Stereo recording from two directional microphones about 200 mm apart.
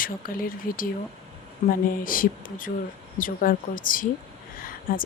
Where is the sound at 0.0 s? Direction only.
45° left (ahead or behind).